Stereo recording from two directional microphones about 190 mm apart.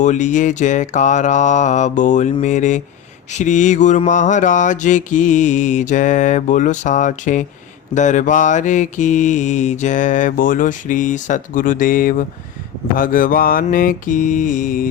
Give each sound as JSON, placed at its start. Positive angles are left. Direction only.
{"t": 0.0, "sound": "mantra", "side_deg": 40}